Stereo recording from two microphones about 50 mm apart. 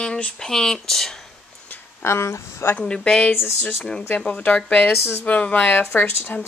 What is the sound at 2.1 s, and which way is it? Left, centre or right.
Speech, left.